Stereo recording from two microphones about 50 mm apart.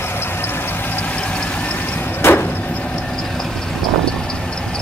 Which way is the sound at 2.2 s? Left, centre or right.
Left.